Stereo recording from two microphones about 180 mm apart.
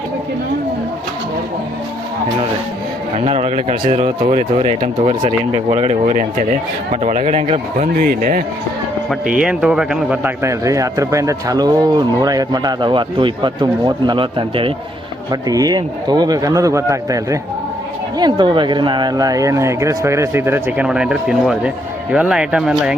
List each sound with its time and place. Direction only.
3.2 s speech: 35° right (ahead or behind)
9.4 s a man's voice: 5° right (ahead or behind)